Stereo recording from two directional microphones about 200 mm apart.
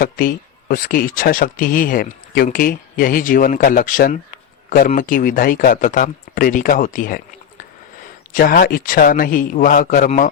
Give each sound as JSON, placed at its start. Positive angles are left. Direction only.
{"t": 0.0, "sound": "speech", "side_deg": 45}